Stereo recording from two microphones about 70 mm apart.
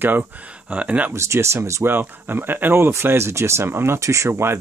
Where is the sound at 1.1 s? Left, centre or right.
Right.